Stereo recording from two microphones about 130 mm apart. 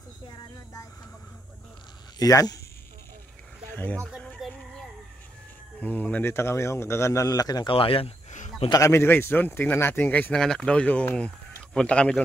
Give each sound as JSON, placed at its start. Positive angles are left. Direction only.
{"t": 2.1, "sound": "speech", "side_deg": 30}
{"t": 3.7, "sound": "speech", "side_deg": 10}
{"t": 4.4, "sound": "a sound", "side_deg": 5}
{"t": 5.8, "sound": "a man's voice", "side_deg": 10}
{"t": 7.7, "sound": "speech", "side_deg": 45}
{"t": 8.7, "sound": "speech", "side_deg": 20}